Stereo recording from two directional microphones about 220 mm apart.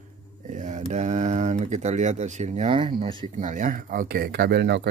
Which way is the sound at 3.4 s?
35° right (ahead or behind).